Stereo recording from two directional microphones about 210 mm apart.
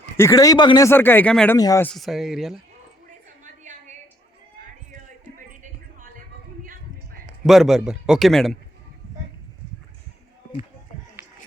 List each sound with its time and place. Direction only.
0.2 s speech: 15° left (ahead or behind)
1.5 s speech: 15° left (ahead or behind)
1.9 s a man's voice: centre (ahead or behind)
3.4 s a sound: 35° right (ahead or behind)
7.4 s a man's voice: centre (ahead or behind)
11.2 s music: 15° right (ahead or behind)